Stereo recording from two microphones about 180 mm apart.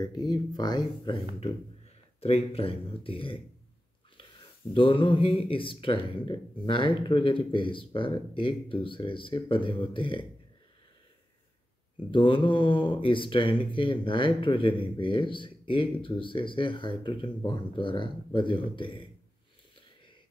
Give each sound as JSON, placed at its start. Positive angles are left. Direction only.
{"t": 0.0, "sound": "speech", "side_deg": 25}
{"t": 4.7, "sound": "speech", "side_deg": 25}
{"t": 12.1, "sound": "speech", "side_deg": 30}